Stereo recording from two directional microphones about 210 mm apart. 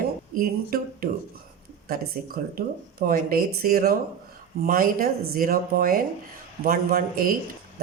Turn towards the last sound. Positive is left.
turn(degrees=-45)  # may be behind; listen again after turning